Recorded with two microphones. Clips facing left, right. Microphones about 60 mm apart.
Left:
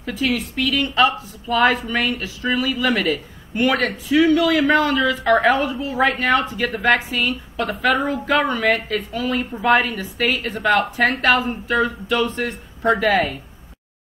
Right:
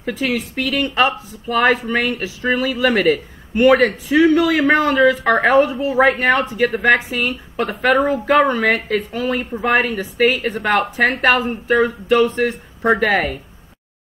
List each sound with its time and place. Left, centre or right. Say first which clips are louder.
0.0 s a woman's voice: right 1 dB; right